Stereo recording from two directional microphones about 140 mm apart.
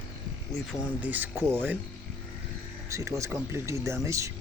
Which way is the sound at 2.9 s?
20° right (ahead or behind).